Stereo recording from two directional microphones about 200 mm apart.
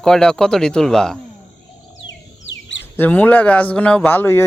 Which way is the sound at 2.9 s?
10° left (ahead or behind).